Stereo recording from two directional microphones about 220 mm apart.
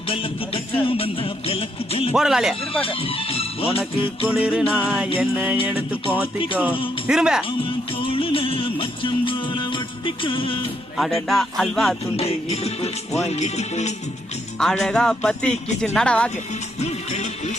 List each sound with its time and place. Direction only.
0.1 s music: 25° left (ahead or behind)
2.1 s a man's voice: centre (ahead or behind)
2.8 s speech: 25° left (ahead or behind)
3.9 s music: 25° left (ahead or behind)
4.3 s a man's voice: 5° right (ahead or behind)
5.1 s music: 5° right (ahead or behind)
7.1 s a man's voice: 5° right (ahead or behind)
8.0 s music: 25° left (ahead or behind)
10.9 s a man's voice: centre (ahead or behind)
12.1 s music: 30° left (ahead or behind)
14.6 s a man's voice: centre (ahead or behind)
16.8 s music: 30° left (ahead or behind)